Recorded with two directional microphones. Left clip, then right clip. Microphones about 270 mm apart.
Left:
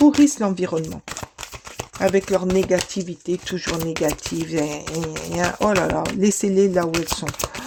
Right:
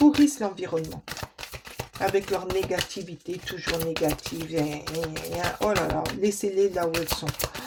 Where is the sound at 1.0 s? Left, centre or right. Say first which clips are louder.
Left 4 dB; left.